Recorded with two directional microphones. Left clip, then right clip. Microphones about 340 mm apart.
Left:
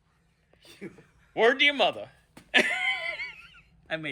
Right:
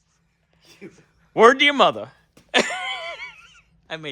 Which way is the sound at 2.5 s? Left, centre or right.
Centre.